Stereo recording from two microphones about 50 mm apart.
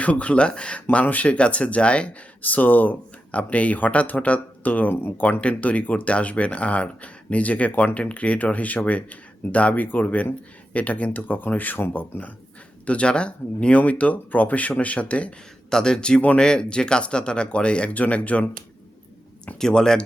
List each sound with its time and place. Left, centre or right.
0.0 s speech: left
0.9 s speech: left
2.4 s speech: left
4.9 s speech: left
5.2 s speech: left
15.7 s speech: centre
19.5 s speech: centre